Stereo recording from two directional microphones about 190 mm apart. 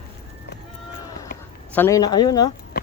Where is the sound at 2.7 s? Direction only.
45° left (ahead or behind).